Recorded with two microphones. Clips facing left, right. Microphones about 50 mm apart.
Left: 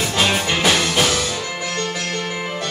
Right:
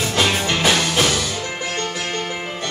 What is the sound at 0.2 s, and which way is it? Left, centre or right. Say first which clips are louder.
Music: even; centre.